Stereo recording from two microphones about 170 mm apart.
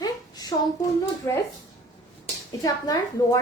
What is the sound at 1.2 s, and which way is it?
Speech, 20° left (ahead or behind).